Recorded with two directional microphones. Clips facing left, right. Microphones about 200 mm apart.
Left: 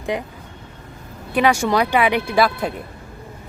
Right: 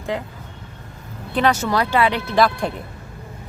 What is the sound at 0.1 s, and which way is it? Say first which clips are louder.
Speech: left 1 dB; 15° left (ahead or behind).